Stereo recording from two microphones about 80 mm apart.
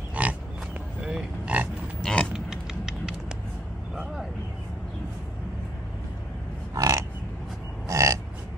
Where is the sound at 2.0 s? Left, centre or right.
Centre.